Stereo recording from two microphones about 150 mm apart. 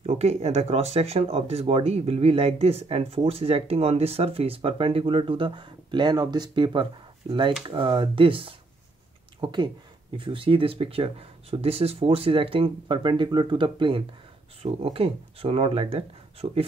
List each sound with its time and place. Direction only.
0.0 s speech: 45° right (ahead or behind)